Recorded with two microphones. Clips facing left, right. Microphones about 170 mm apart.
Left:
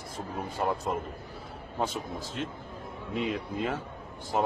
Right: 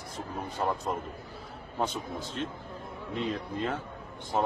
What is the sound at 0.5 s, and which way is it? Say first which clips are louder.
A man's voice: left 1 dB; 5° left (ahead or behind).